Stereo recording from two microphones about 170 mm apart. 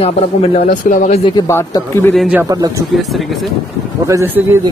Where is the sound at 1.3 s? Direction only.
20° left (ahead or behind).